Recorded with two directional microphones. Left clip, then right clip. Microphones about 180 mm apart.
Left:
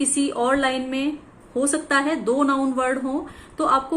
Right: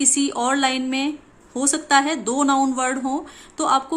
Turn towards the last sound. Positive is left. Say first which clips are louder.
# even
turn(degrees=-40)  # may be behind; listen again after turning